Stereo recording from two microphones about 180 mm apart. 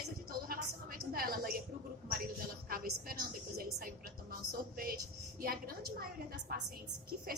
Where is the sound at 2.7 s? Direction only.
55° right (ahead or behind).